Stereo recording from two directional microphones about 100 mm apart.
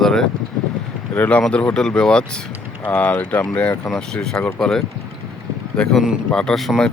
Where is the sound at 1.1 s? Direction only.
15° left (ahead or behind).